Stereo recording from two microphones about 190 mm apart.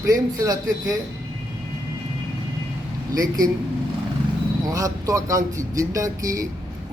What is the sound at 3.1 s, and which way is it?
Speech, 20° right (ahead or behind).